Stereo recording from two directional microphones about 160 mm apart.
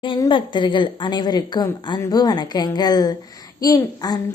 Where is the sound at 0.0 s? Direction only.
30° left (ahead or behind).